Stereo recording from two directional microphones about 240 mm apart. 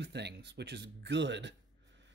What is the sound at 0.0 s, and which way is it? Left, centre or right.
Speech, right.